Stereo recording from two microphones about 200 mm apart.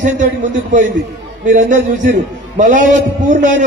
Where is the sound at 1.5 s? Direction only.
40° right (ahead or behind).